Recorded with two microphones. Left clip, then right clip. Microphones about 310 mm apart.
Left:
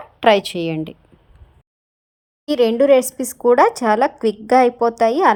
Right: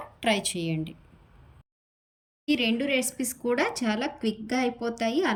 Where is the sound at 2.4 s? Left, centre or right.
Centre.